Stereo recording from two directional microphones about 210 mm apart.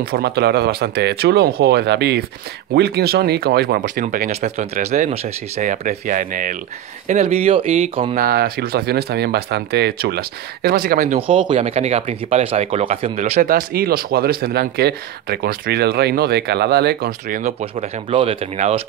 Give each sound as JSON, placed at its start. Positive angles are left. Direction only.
{"t": 0.0, "sound": "speech", "side_deg": -50}
{"t": 8.2, "sound": "speech", "side_deg": -45}
{"t": 11.1, "sound": "speech", "side_deg": -25}